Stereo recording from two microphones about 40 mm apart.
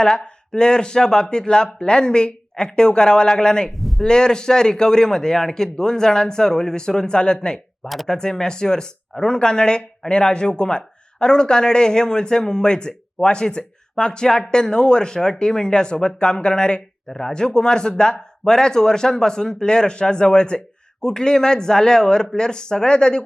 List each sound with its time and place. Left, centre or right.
0.5 s speech: centre
3.8 s a sound: centre
4.0 s a man's voice: centre
17.1 s a man's voice: centre